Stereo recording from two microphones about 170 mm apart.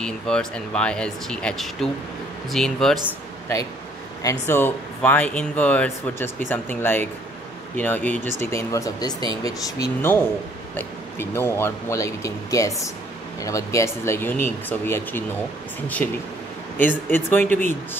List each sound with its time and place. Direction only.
0.0 s speech: 5° left (ahead or behind)
4.2 s speech: 15° left (ahead or behind)